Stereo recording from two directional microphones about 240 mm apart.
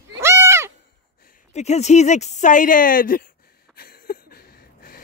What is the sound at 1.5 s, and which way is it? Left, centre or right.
Speech, left.